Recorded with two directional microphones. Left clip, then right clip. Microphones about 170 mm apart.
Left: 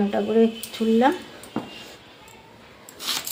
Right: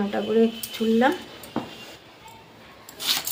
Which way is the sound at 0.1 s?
25° left (ahead or behind).